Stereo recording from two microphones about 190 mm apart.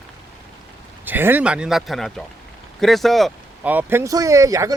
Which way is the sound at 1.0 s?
10° right (ahead or behind).